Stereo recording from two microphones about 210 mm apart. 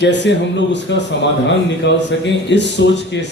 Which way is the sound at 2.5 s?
55° left (ahead or behind).